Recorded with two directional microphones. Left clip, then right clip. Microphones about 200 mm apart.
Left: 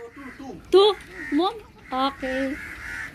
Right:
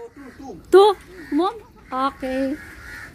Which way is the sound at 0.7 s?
15° right (ahead or behind).